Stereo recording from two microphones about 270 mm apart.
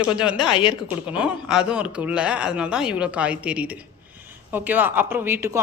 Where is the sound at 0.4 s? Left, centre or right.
Centre.